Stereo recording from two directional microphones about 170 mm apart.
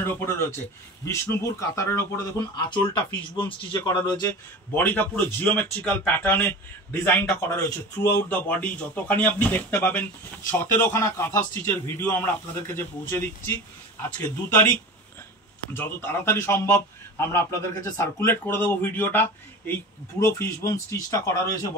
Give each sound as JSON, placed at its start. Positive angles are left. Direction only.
{"t": 0.0, "sound": "a man's voice", "side_deg": 15}
{"t": 4.7, "sound": "a man's voice", "side_deg": 10}
{"t": 14.1, "sound": "a man's voice", "side_deg": 10}